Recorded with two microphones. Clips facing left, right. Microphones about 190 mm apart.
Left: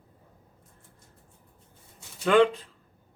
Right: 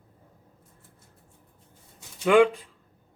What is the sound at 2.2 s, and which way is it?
Speech, 10° right (ahead or behind).